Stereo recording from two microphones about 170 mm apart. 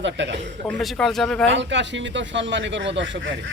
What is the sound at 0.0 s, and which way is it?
Speech, 90° right.